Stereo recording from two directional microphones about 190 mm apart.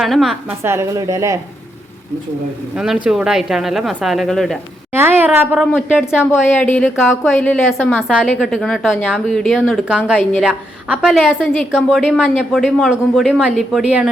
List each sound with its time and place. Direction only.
0.0 s a woman's voice: centre (ahead or behind)
0.6 s speech: 15° right (ahead or behind)
2.7 s a woman's voice: 5° right (ahead or behind)
4.9 s speech: 10° right (ahead or behind)
6.7 s a woman's voice: 10° left (ahead or behind)